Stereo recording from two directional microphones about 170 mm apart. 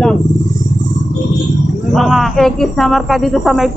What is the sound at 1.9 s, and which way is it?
Speech, centre (ahead or behind).